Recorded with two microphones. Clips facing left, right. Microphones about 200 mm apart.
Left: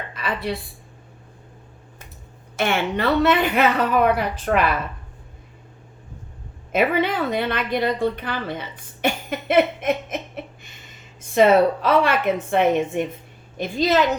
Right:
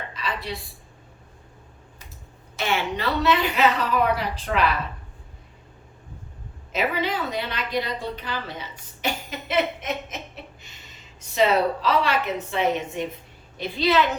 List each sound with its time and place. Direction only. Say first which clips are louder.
0.1 s a sound: left 7 dB; 55° left (ahead or behind)
2.6 s a woman's voice: left 4 dB; 55° left (ahead or behind)
6.7 s a woman's voice: left 5 dB; 55° left (ahead or behind)